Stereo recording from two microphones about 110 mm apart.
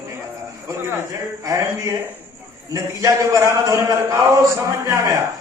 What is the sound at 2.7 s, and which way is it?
A man's voice, 30° right (ahead or behind).